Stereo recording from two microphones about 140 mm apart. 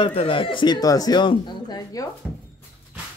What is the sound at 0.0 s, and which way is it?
Speech, 40° left (ahead or behind).